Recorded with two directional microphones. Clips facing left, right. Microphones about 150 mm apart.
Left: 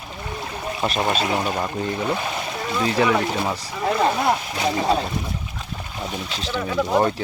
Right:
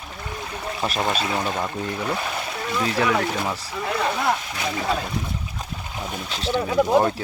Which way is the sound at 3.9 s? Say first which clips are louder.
Left 5 dB; 30° left (ahead or behind).